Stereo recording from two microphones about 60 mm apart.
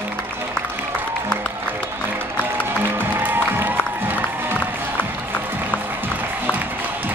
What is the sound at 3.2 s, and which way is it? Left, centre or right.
Music, right.